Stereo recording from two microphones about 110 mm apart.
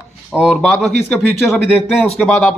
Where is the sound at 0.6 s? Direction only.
5° left (ahead or behind).